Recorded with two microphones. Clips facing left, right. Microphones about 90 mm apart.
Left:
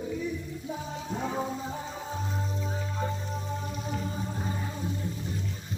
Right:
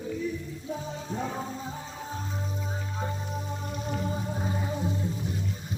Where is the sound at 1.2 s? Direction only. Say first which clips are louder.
Left 5 dB; 5° left (ahead or behind).